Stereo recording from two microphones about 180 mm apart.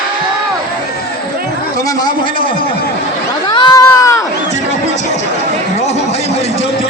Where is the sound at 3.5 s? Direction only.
25° left (ahead or behind).